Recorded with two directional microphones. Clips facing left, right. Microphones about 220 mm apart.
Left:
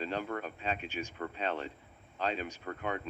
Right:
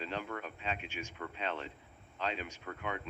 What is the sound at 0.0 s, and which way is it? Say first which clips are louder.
Speech: left 4 dB; 40° left (ahead or behind).